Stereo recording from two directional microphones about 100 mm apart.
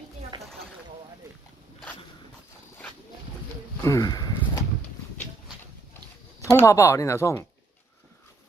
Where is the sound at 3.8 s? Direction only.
35° left (ahead or behind).